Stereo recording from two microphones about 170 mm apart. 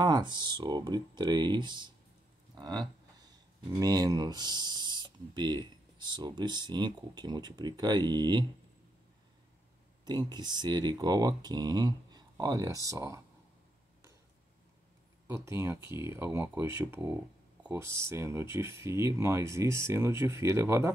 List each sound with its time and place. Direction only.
0.0 s speech: 25° right (ahead or behind)
2.5 s a sound: 25° right (ahead or behind)
3.8 s speech: 20° right (ahead or behind)
10.0 s speech: 25° right (ahead or behind)
15.2 s speech: 15° right (ahead or behind)